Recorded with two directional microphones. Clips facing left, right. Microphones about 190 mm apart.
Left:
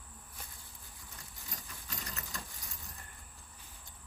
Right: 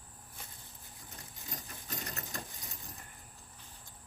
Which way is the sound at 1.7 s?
40° right (ahead or behind).